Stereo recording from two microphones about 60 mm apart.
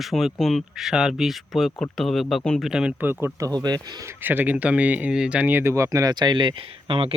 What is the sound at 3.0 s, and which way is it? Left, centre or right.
Speech, right.